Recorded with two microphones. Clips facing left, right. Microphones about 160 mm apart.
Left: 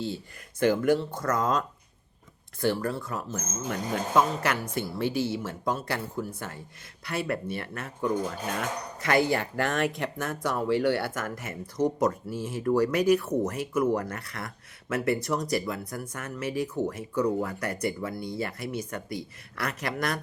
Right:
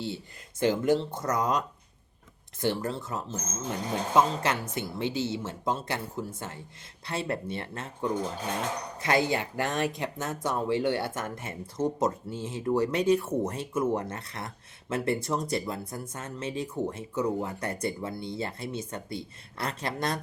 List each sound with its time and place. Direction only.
0.6 s speech: 20° right (ahead or behind)